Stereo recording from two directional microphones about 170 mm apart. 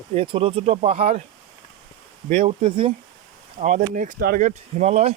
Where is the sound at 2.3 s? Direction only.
30° right (ahead or behind).